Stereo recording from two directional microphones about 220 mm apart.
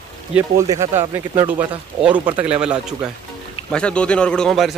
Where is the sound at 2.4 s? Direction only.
5° right (ahead or behind).